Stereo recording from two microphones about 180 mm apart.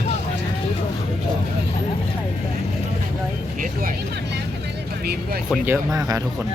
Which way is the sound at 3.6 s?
50° right (ahead or behind).